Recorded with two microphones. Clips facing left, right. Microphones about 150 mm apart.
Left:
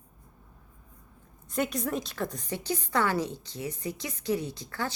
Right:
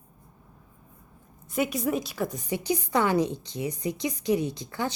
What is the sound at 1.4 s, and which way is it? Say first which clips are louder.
Speech: right 3 dB; 5° right (ahead or behind).